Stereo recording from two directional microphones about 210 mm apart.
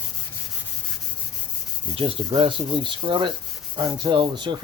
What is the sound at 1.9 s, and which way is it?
Rub, 25° right (ahead or behind).